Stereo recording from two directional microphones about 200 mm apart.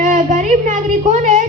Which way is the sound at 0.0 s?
40° right (ahead or behind).